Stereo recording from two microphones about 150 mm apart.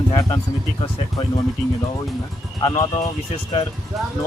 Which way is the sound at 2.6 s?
30° left (ahead or behind).